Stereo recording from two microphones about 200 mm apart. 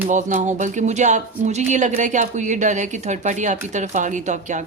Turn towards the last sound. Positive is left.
turn(degrees=-35)  # may be behind; listen again after turning